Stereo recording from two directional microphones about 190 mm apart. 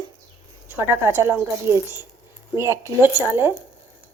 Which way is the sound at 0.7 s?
10° right (ahead or behind).